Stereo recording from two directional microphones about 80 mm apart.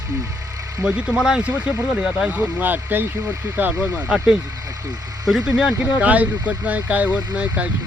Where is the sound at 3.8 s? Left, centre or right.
Right.